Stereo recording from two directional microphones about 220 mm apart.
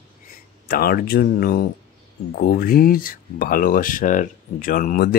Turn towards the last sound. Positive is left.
turn(degrees=40)  # may be behind; listen again after turning